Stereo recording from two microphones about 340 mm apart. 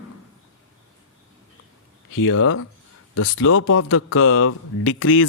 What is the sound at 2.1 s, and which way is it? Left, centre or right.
Speech, left.